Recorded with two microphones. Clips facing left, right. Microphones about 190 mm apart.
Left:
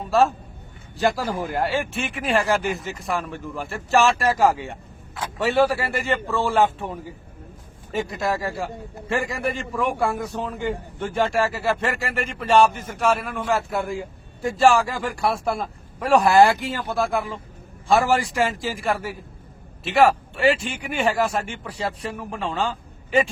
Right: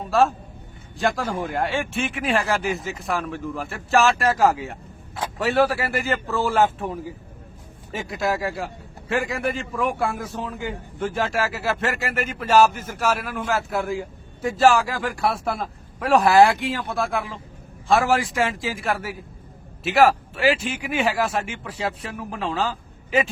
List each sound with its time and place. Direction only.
0.0 s a man's voice: centre (ahead or behind)
7.9 s a man's voice: centre (ahead or behind)